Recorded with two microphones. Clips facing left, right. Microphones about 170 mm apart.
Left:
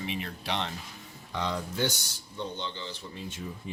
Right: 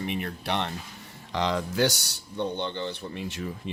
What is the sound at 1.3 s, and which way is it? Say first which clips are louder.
Speech: right 6 dB; 90° right.